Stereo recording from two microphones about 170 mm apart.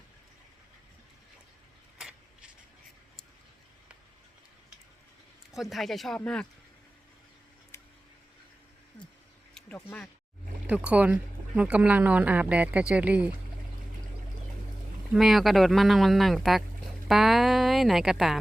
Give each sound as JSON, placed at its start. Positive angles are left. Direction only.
{"t": 2.0, "sound": "a sound", "side_deg": -5}
{"t": 5.5, "sound": "speech", "side_deg": 0}
{"t": 7.7, "sound": "a sound", "side_deg": 15}
{"t": 9.6, "sound": "speech", "side_deg": 10}
{"t": 10.7, "sound": "speech", "side_deg": -10}
{"t": 15.1, "sound": "speech", "side_deg": 0}